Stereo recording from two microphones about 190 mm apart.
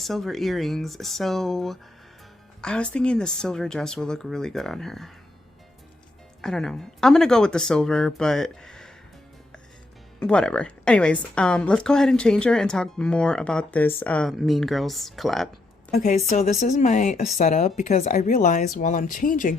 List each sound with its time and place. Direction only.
0.0 s speech: centre (ahead or behind)
6.4 s speech: centre (ahead or behind)
10.2 s speech: 5° left (ahead or behind)
15.9 s speech: 40° left (ahead or behind)